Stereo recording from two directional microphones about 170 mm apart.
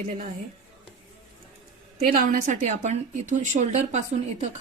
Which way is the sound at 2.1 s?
55° right (ahead or behind).